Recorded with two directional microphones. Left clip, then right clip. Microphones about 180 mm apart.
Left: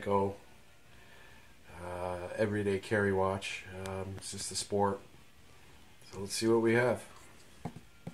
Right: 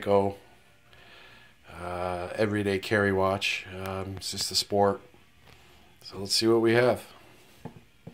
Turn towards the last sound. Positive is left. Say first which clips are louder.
# right 6 dB
turn(degrees=-30)  # may be behind; listen again after turning